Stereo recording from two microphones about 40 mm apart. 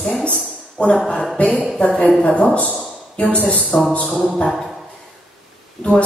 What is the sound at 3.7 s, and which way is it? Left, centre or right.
Speech, centre.